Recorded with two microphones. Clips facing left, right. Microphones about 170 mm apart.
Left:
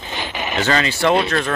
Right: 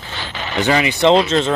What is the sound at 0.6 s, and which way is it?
Speech, 15° right (ahead or behind).